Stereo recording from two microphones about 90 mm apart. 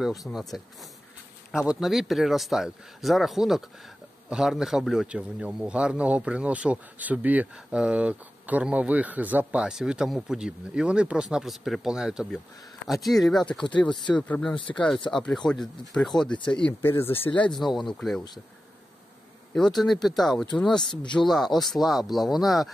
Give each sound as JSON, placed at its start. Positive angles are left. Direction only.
{"t": 0.0, "sound": "a man's voice", "side_deg": 0}
{"t": 9.7, "sound": "a man's voice", "side_deg": -5}
{"t": 14.1, "sound": "speech", "side_deg": 15}
{"t": 14.7, "sound": "speech", "side_deg": 25}
{"t": 15.0, "sound": "speech", "side_deg": 5}
{"t": 16.8, "sound": "speech", "side_deg": 25}
{"t": 17.4, "sound": "speech", "side_deg": 5}
{"t": 19.5, "sound": "speech", "side_deg": 0}